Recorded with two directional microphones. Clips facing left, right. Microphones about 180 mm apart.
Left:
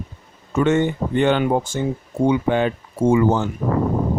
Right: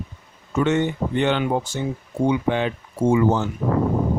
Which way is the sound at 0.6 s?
50° left (ahead or behind).